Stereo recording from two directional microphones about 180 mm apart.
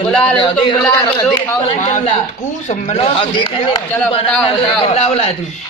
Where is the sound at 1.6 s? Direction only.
35° left (ahead or behind).